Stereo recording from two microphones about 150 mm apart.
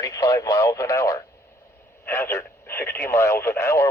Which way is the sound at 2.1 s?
15° left (ahead or behind).